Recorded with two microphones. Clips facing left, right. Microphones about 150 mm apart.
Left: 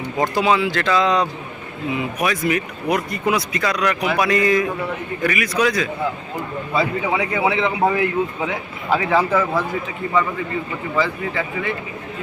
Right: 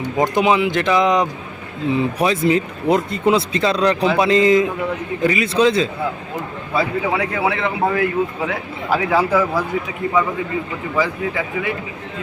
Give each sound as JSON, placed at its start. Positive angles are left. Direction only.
{"t": 0.2, "sound": "speech", "side_deg": -20}
{"t": 6.7, "sound": "a man's voice", "side_deg": 0}
{"t": 10.9, "sound": "speech", "side_deg": -10}